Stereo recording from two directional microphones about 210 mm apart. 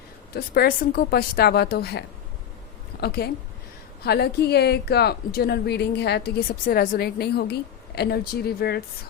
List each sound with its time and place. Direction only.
0.3 s a woman's voice: 45° left (ahead or behind)